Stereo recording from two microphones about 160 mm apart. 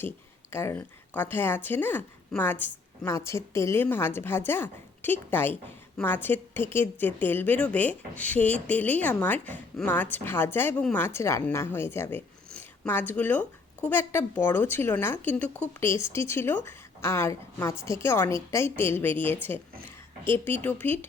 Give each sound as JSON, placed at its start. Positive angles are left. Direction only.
{"t": 0.5, "sound": "a woman's voice", "side_deg": 15}
{"t": 15.4, "sound": "speech", "side_deg": -15}
{"t": 15.8, "sound": "a woman's voice", "side_deg": 15}